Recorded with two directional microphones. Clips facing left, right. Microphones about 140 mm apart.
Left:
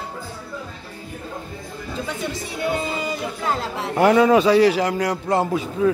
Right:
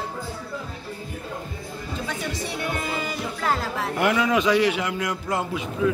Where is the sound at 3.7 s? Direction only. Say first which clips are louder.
Left 10 dB; 30° left (ahead or behind).